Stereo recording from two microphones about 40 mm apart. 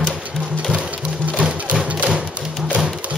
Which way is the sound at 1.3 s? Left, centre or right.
Right.